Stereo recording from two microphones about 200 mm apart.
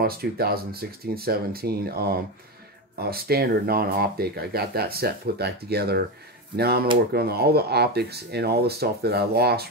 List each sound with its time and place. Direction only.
0.0 s speech: 50° right (ahead or behind)